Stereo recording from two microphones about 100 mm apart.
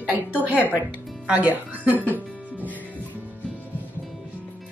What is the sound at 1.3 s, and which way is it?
Speech, 15° right (ahead or behind).